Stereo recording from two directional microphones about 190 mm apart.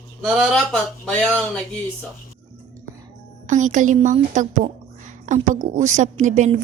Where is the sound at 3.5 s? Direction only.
40° right (ahead or behind).